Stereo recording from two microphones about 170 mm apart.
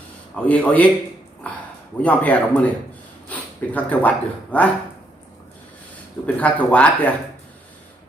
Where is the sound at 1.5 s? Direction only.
5° left (ahead or behind).